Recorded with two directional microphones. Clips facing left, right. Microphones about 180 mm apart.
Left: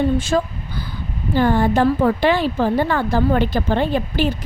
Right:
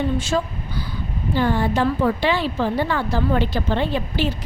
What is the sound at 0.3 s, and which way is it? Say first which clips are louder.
A woman's voice: left 3 dB; 50° left (ahead or behind).